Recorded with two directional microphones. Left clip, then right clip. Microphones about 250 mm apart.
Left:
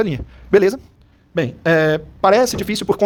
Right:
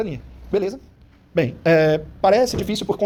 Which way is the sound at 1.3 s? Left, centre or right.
Centre.